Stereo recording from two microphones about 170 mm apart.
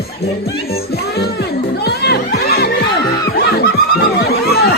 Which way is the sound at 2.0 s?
70° left (ahead or behind).